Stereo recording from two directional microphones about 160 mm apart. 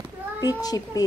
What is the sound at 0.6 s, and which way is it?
Speech, 25° left (ahead or behind).